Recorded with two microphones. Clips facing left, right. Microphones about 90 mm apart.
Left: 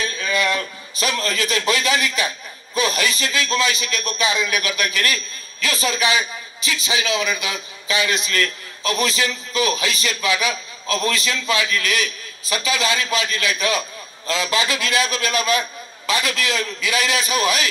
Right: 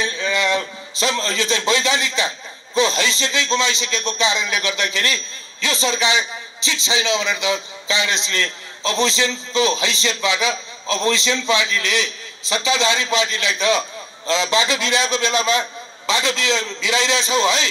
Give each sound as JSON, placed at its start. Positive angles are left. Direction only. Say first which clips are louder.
{"t": 0.0, "sound": "a man's voice", "louder": "right 1 dB", "side_deg": -25}